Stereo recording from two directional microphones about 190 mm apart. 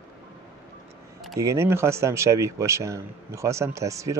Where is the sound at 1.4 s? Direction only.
15° right (ahead or behind).